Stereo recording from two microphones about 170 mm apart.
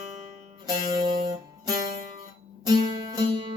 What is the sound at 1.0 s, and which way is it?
Music, 20° right (ahead or behind).